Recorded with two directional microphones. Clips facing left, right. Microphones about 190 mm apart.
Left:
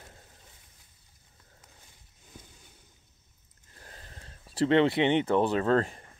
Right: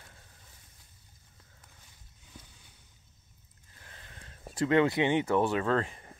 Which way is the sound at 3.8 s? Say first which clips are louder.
Left 3 dB; 40° left (ahead or behind).